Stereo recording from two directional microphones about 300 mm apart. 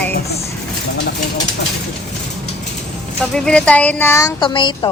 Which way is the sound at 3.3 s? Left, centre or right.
Centre.